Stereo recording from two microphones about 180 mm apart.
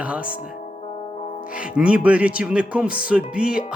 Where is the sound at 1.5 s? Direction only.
5° right (ahead or behind).